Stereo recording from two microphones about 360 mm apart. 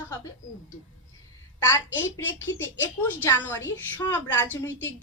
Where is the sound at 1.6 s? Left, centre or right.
Centre.